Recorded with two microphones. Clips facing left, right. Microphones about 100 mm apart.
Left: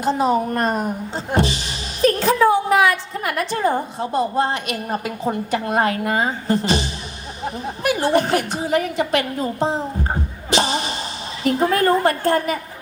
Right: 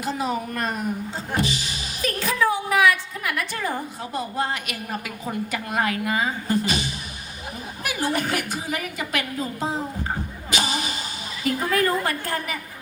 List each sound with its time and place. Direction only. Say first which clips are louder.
0.0 s a woman's voice: left 8 dB; 30° left (ahead or behind)
10.5 s music: left 6 dB; 30° left (ahead or behind)
11.4 s speech: left 5 dB; 30° left (ahead or behind)